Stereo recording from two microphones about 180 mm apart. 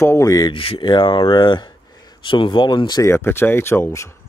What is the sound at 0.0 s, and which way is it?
Speech, 15° left (ahead or behind).